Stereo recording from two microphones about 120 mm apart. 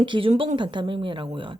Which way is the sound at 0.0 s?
45° right (ahead or behind).